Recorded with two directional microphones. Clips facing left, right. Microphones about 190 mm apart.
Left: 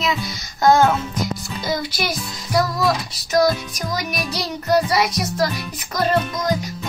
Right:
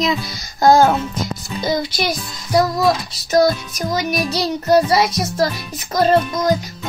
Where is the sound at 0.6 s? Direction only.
35° right (ahead or behind).